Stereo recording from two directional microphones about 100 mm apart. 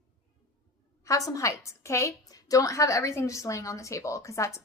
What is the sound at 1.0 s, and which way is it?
A woman's voice, 35° left (ahead or behind).